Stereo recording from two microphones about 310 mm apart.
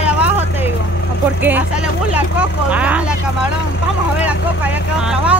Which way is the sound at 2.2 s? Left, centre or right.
Centre.